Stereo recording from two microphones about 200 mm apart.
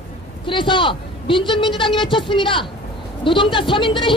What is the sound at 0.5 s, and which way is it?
A man's voice, 25° left (ahead or behind).